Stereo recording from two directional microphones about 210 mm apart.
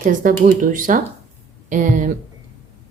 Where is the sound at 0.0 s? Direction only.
40° right (ahead or behind).